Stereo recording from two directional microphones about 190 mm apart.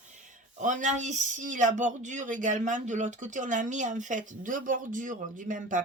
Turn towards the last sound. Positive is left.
turn(degrees=-45)  # may be behind; listen again after turning